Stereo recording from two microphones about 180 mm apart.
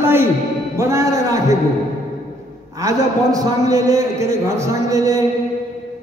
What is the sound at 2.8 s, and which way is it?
A man's voice, 20° right (ahead or behind).